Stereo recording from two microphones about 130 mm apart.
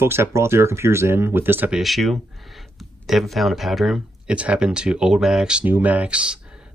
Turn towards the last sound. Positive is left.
turn(degrees=-10)  # may be behind; listen again after turning